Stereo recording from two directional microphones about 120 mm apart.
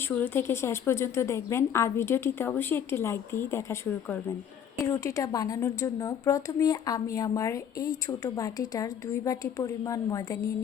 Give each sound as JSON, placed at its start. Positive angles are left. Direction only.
{"t": 0.0, "sound": "a woman's voice", "side_deg": 15}